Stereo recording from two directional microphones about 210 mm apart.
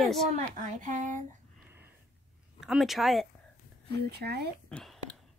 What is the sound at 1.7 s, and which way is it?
Sniff, 10° right (ahead or behind).